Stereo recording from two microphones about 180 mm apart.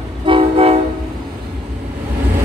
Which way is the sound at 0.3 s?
30° right (ahead or behind).